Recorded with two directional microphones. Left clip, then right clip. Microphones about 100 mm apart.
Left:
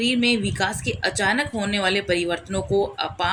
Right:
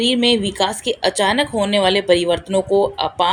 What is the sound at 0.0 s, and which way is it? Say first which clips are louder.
A woman's voice: right 5 dB; 45° right (ahead or behind).